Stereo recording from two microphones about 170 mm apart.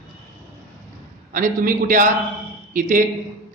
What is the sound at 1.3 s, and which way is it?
A man's voice, 50° right (ahead or behind).